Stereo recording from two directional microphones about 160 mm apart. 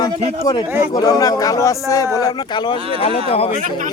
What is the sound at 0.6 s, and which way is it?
Speech, 15° right (ahead or behind).